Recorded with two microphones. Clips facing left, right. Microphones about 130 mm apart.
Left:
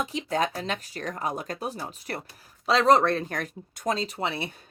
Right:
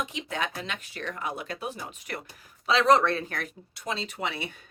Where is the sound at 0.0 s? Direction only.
35° left (ahead or behind).